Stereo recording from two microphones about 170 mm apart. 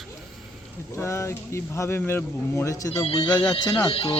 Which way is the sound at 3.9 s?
35° left (ahead or behind).